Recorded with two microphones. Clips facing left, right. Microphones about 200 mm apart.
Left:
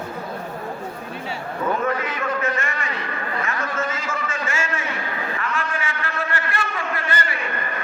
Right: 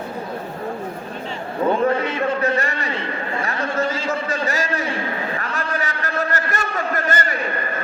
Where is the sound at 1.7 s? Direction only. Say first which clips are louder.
Right 5 dB; 30° right (ahead or behind).